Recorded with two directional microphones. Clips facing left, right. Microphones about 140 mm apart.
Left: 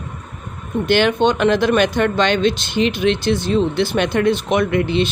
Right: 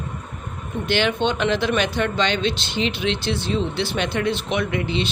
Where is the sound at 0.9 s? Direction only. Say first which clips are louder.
Left 6 dB; 50° left (ahead or behind).